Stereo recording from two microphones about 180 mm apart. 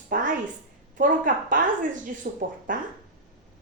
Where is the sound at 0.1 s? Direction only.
50° right (ahead or behind).